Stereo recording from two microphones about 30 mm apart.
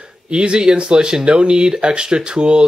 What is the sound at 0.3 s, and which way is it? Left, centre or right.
Speech, right.